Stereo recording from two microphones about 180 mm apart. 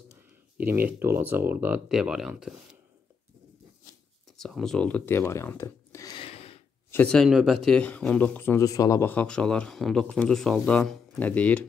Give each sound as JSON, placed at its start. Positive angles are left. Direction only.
{"t": 0.6, "sound": "speech", "side_deg": -10}
{"t": 4.4, "sound": "speech", "side_deg": 0}
{"t": 6.1, "sound": "a sound", "side_deg": 30}
{"t": 6.9, "sound": "speech", "side_deg": 5}